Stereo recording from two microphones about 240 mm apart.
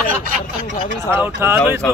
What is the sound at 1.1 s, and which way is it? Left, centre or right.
Speech, centre.